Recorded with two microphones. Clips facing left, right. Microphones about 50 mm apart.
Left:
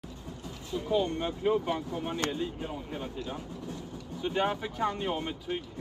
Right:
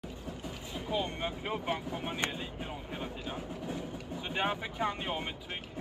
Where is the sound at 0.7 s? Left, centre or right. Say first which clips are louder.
Left 6 dB; centre.